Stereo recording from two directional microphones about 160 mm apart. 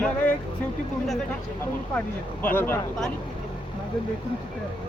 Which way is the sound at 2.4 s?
15° left (ahead or behind).